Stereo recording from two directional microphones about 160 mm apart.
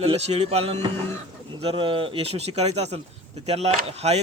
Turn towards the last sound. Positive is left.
turn(degrees=-40)  # may be behind; listen again after turning